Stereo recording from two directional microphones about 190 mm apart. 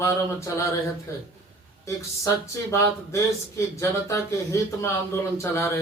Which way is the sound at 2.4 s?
15° left (ahead or behind).